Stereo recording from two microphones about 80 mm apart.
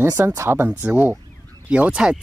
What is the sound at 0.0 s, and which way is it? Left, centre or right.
Speech, right.